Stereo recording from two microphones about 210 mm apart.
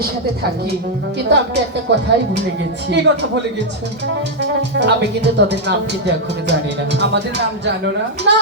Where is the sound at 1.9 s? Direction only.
55° right (ahead or behind).